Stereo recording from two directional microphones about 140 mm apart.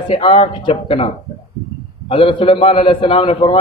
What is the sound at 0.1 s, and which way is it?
A man's voice, 40° left (ahead or behind).